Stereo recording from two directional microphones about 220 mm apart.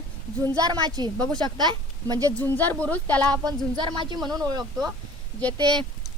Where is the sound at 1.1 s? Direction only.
5° left (ahead or behind).